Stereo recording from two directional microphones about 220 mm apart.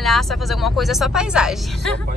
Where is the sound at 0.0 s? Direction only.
Centre (ahead or behind).